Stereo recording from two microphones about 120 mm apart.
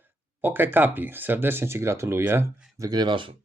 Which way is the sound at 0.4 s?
15° right (ahead or behind).